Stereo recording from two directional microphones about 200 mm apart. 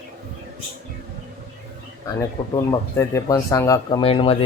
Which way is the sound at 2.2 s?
20° left (ahead or behind).